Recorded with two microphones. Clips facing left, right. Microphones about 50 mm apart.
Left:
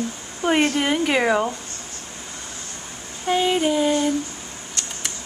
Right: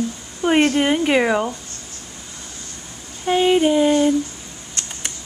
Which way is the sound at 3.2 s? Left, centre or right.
Centre.